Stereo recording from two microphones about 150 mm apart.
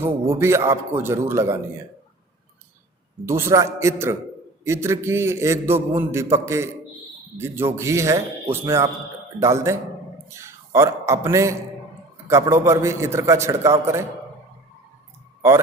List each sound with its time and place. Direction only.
0.0 s a man's voice: 15° right (ahead or behind)
3.2 s a man's voice: 15° right (ahead or behind)
15.4 s speech: 15° right (ahead or behind)